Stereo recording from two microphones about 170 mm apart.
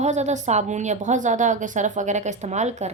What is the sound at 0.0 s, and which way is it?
A woman's voice, 40° right (ahead or behind).